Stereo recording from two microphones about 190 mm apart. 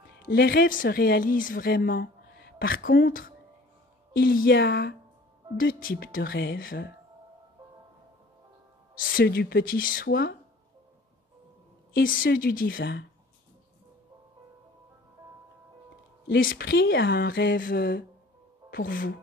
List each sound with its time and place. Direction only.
0.3 s a woman's voice: 55° left (ahead or behind)
5.6 s a woman's voice: 50° left (ahead or behind)
9.1 s a woman's voice: 55° left (ahead or behind)
12.0 s speech: 90° left
12.3 s a woman's voice: 50° left (ahead or behind)
16.3 s speech: 75° left (ahead or behind); by 19.1 s 50° left (ahead or behind)